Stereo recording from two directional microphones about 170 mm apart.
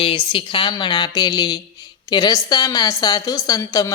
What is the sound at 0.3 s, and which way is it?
A woman's voice, 30° left (ahead or behind).